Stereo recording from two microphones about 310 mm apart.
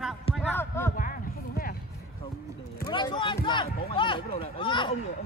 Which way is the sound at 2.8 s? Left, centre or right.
Centre.